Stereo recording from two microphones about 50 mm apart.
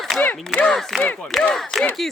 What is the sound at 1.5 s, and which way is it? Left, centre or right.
Speech, centre.